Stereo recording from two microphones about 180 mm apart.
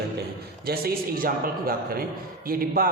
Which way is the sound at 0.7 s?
55° right (ahead or behind).